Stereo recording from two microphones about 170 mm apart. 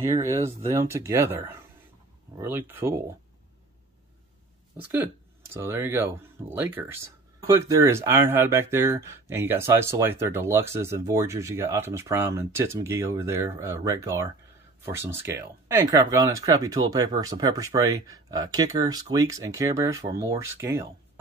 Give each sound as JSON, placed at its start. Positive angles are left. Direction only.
{"t": 0.1, "sound": "speech", "side_deg": -15}
{"t": 5.5, "sound": "speech", "side_deg": -15}